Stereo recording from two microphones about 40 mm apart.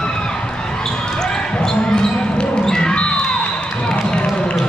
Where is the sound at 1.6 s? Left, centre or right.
Centre.